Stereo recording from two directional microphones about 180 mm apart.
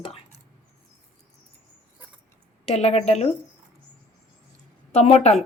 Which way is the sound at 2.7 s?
35° left (ahead or behind).